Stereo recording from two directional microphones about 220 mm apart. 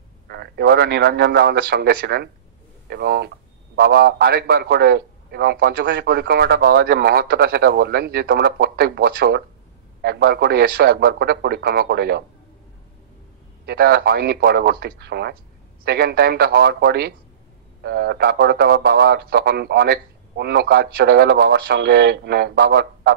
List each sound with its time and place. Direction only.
0.3 s a man's voice: 45° right (ahead or behind)
13.7 s a man's voice: 45° right (ahead or behind)